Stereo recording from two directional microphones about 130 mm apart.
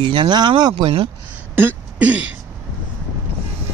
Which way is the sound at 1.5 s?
15° right (ahead or behind).